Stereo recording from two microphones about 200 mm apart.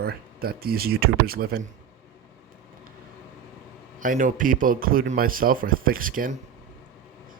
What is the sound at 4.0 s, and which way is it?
Speech, 40° right (ahead or behind).